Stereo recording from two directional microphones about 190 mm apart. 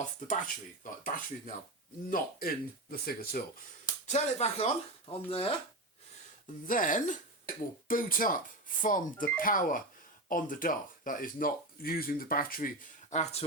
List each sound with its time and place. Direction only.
1.0 s speech: 45° left (ahead or behind)
4.0 s speech: 35° left (ahead or behind)
6.7 s speech: 45° left (ahead or behind)